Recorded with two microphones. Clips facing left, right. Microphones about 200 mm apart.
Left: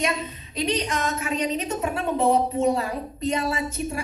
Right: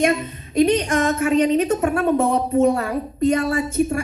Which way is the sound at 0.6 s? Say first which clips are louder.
Right 9 dB; 50° right (ahead or behind).